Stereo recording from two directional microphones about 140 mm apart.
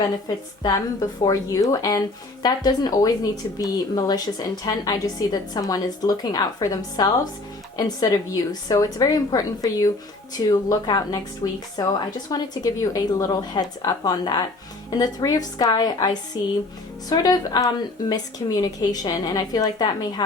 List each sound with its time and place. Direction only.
0.6 s a woman's voice: 30° left (ahead or behind)